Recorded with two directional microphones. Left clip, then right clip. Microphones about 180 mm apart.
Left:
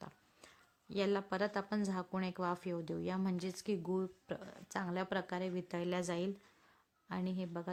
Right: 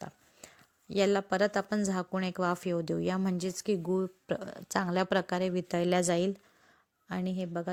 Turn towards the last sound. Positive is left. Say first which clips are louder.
# right 7 dB
turn(degrees=-25)  # may be behind; listen again after turning